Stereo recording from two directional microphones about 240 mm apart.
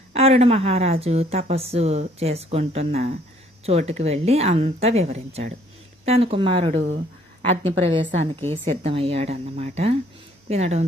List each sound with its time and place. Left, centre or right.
0.1 s a woman's voice: right